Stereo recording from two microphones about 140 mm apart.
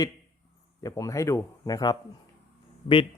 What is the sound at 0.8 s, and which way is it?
A man's voice, 25° left (ahead or behind).